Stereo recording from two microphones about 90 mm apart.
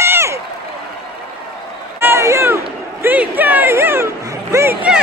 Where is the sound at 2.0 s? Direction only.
30° right (ahead or behind).